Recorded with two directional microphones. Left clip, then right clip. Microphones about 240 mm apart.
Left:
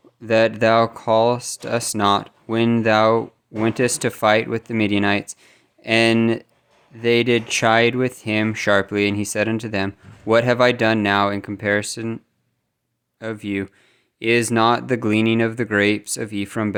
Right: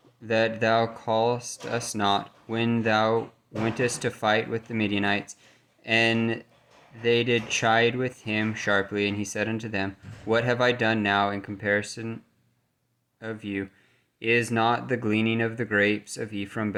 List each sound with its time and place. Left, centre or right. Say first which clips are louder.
0.2 s speech: left 8 dB; left